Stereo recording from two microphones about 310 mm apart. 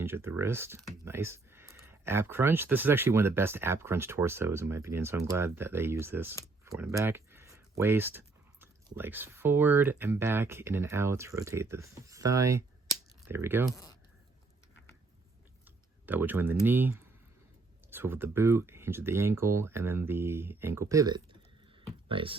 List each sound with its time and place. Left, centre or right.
0.0 s speech: centre
15.6 s speech: centre